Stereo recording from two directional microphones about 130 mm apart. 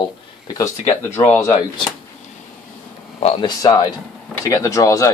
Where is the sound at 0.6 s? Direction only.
20° left (ahead or behind).